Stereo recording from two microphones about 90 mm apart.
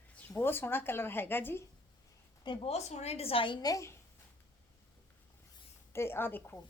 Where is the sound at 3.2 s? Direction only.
85° left.